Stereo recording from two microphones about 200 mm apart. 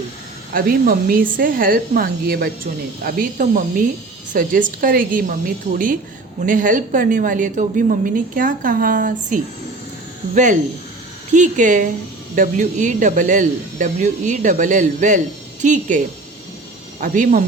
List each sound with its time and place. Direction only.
0.5 s a woman's voice: 45° right (ahead or behind)
17.0 s a woman's voice: 40° right (ahead or behind)